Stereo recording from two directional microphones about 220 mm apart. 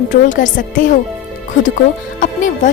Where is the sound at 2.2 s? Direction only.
35° left (ahead or behind).